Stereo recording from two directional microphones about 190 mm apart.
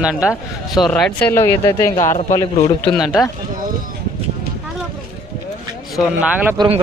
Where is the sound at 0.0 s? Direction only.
5° right (ahead or behind); by 2.0 s 15° left (ahead or behind).